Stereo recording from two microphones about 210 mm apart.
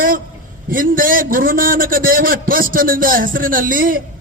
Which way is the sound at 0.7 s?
40° right (ahead or behind).